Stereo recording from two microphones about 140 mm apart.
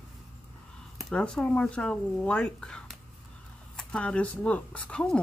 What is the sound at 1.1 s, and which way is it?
Speech, 5° left (ahead or behind).